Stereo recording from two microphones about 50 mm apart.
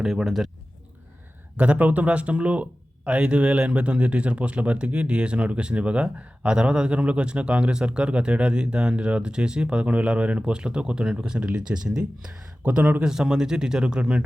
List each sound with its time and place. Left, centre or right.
0.0 s speech: centre
1.5 s speech: right
13.1 s speech: centre